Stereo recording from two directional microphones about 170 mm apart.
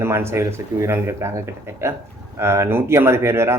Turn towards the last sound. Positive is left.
turn(degrees=-15)  # may be behind; listen again after turning